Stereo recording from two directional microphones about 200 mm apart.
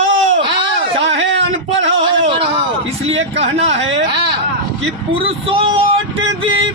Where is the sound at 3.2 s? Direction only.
30° right (ahead or behind).